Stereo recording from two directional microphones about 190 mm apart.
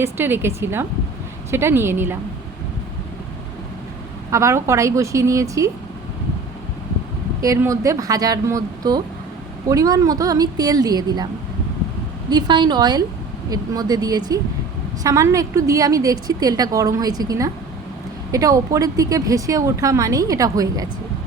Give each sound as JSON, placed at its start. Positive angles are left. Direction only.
{"t": 0.0, "sound": "speech", "side_deg": -10}
{"t": 4.3, "sound": "speech", "side_deg": -15}
{"t": 7.4, "sound": "a woman's voice", "side_deg": -15}
{"t": 12.3, "sound": "a woman's voice", "side_deg": -20}